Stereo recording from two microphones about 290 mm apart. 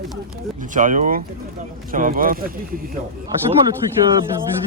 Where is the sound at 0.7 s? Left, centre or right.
Right.